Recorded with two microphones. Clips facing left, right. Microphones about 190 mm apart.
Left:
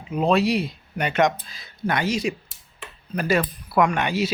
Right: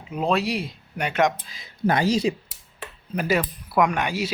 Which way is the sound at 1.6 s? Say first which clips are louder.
Right 3 dB; 35° right (ahead or behind).